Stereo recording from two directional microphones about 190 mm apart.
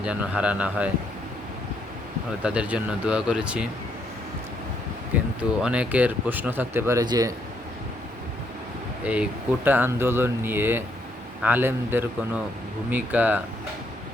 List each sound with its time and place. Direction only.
0.0 s speech: 5° right (ahead or behind)
2.4 s speech: 5° right (ahead or behind)
5.1 s speech: 10° right (ahead or behind)
9.0 s speech: 5° right (ahead or behind)